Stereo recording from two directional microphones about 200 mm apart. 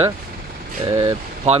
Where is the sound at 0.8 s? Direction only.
15° right (ahead or behind).